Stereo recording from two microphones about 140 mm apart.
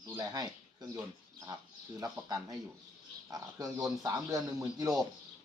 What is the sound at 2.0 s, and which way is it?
Speech, 25° right (ahead or behind).